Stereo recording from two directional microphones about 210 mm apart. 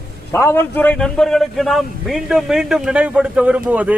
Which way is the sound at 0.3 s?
10° left (ahead or behind).